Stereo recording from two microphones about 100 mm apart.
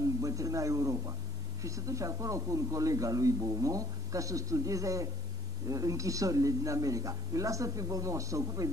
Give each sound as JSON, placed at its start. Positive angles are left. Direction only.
{"t": 0.2, "sound": "speech", "side_deg": -35}